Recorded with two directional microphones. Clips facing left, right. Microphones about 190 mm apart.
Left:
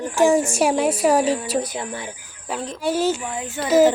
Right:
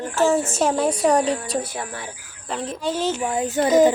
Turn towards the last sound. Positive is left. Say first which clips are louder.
# even
turn(degrees=5)  # may be behind; listen again after turning